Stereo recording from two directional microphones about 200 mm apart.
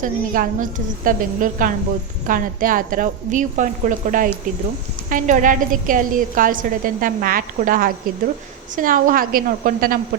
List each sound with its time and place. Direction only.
0.0 s a woman's voice: 40° right (ahead or behind)